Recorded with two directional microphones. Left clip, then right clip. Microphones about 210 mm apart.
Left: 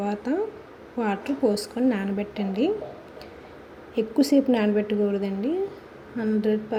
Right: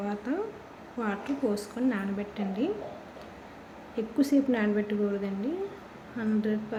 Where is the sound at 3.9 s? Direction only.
20° left (ahead or behind).